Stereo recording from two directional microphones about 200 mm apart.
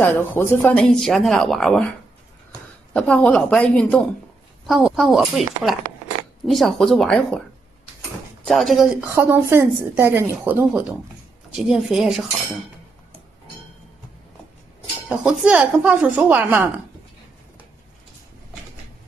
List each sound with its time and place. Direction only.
0.0 s speech: 10° left (ahead or behind)
2.9 s speech: 5° left (ahead or behind)
8.5 s a woman's voice: centre (ahead or behind)
15.0 s a woman's voice: 5° right (ahead or behind)